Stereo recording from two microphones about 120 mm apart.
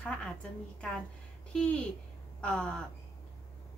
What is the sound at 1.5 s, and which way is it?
A woman's voice, 10° left (ahead or behind).